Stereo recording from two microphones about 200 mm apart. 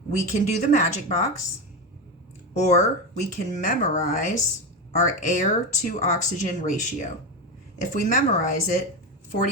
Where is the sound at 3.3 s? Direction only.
40° left (ahead or behind).